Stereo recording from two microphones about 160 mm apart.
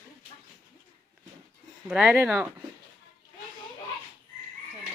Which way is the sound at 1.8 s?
5° right (ahead or behind).